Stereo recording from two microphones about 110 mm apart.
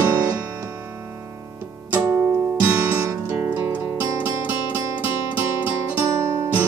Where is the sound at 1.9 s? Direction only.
15° right (ahead or behind).